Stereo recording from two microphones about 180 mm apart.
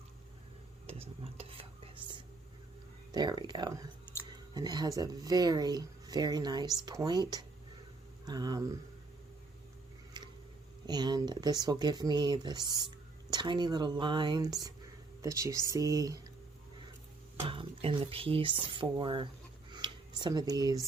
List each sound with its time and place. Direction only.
1.2 s stir: 30° right (ahead or behind)
3.1 s speech: 25° right (ahead or behind)
10.2 s a sound: 25° right (ahead or behind)
10.8 s speech: 25° right (ahead or behind)
17.5 s speech: 30° right (ahead or behind)
19.7 s a sound: 25° right (ahead or behind)